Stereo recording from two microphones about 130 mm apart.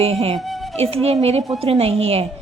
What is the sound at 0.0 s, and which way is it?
Speech, 50° right (ahead or behind).